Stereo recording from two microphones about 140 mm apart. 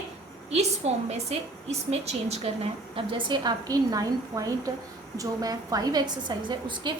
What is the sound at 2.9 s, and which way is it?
A woman's voice, 35° right (ahead or behind).